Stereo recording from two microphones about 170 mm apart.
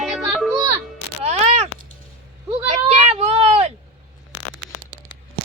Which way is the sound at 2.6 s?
40° right (ahead or behind).